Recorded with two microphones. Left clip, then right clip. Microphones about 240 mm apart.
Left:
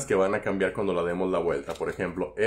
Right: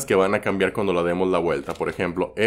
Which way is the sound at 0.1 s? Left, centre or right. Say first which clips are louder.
Right 5 dB; right.